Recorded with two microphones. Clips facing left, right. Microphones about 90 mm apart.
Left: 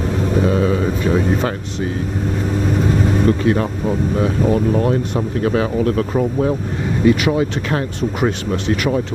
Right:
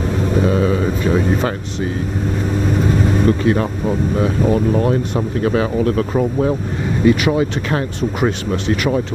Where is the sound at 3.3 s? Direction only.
25° right (ahead or behind).